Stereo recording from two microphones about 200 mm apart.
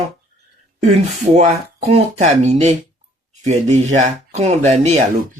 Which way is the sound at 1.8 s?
35° right (ahead or behind).